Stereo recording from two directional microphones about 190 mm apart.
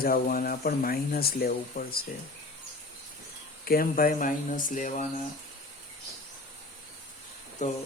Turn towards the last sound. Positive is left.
turn(degrees=40)  # may be behind; listen again after turning